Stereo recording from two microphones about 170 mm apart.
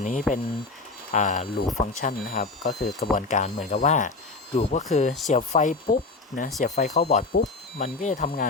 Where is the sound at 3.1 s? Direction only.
45° left (ahead or behind).